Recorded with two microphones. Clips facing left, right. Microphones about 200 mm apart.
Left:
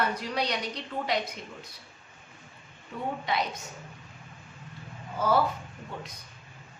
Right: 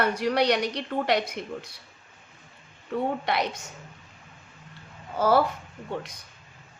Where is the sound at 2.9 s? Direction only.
70° right (ahead or behind).